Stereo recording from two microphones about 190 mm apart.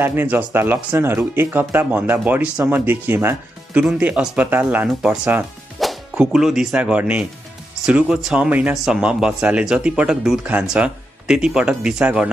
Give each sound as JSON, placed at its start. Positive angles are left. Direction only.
{"t": 0.0, "sound": "speech", "side_deg": -10}